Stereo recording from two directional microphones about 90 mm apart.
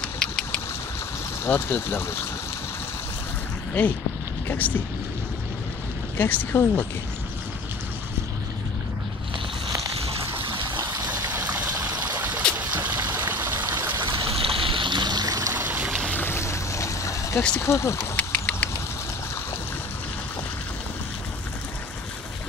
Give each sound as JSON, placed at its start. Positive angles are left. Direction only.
{"t": 0.2, "sound": "vehicle", "side_deg": 10}
{"t": 1.4, "sound": "speech", "side_deg": 25}
{"t": 3.8, "sound": "speech", "side_deg": 15}
{"t": 6.1, "sound": "speech", "side_deg": 25}
{"t": 9.9, "sound": "a sound", "side_deg": -90}
{"t": 11.1, "sound": "water", "side_deg": -20}
{"t": 11.6, "sound": "trickle", "side_deg": -35}
{"t": 12.5, "sound": "trickle", "side_deg": -20}
{"t": 14.0, "sound": "stream", "side_deg": -80}
{"t": 15.5, "sound": "stream", "side_deg": -20}
{"t": 15.9, "sound": "boat", "side_deg": 10}
{"t": 16.2, "sound": "boat", "side_deg": 30}
{"t": 17.6, "sound": "speech", "side_deg": 30}
{"t": 18.1, "sound": "a sound", "side_deg": 15}